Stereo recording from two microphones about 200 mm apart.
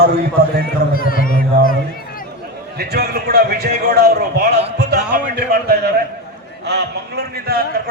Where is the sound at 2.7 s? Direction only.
50° right (ahead or behind).